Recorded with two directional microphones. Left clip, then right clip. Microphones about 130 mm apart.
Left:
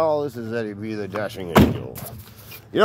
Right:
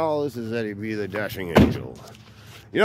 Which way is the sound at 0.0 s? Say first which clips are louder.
Left 3 dB; 25° right (ahead or behind).